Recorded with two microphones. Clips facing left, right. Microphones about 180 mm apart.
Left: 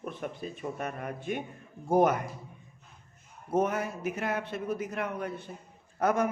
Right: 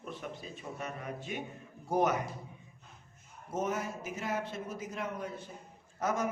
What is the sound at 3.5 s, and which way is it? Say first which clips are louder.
A man's voice: left 6 dB; 60° left (ahead or behind).